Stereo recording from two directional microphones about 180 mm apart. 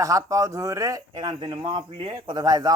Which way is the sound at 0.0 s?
20° right (ahead or behind).